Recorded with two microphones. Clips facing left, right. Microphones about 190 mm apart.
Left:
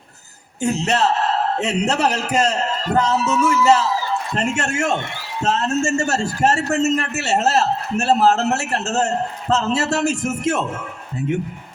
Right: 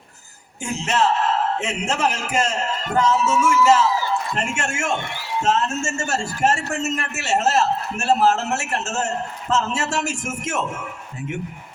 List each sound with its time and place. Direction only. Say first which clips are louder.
0.6 s a man's voice: left 3 dB; 40° left (ahead or behind)